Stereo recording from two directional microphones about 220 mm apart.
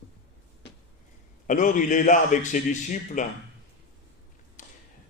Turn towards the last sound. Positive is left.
turn(degrees=35)  # may be behind; listen again after turning